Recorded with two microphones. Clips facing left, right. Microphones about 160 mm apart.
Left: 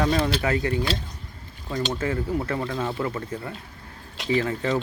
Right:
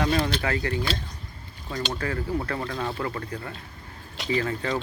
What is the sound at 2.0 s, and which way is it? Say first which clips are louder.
Speech: left 2 dB; 20° left (ahead or behind).